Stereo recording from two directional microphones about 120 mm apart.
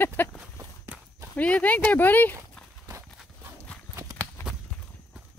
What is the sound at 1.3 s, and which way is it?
Speech, 10° left (ahead or behind).